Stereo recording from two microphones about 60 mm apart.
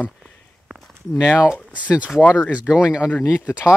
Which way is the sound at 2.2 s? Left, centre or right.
Left.